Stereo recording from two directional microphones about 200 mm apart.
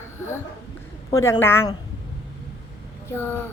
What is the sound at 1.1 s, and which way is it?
Speech, 15° left (ahead or behind).